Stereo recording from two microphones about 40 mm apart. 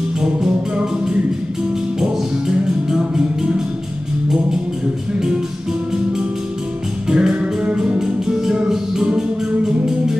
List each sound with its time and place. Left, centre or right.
0.2 s music: centre
7.1 s music: centre